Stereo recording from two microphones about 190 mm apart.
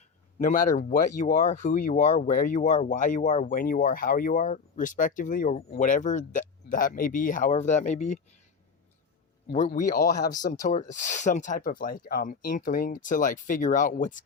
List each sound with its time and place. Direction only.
0.3 s speech: 45° left (ahead or behind)
9.5 s speech: 40° left (ahead or behind)